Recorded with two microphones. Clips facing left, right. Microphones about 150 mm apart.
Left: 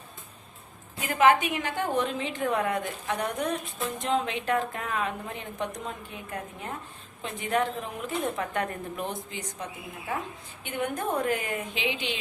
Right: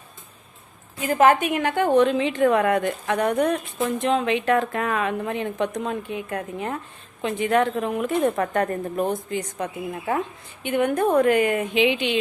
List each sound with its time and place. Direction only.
0.9 s a woman's voice: 30° right (ahead or behind)
1.2 s a woman's voice: 50° right (ahead or behind)
9.6 s a woman's voice: 70° right (ahead or behind)